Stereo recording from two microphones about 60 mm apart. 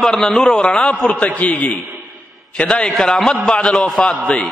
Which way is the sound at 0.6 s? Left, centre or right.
Centre.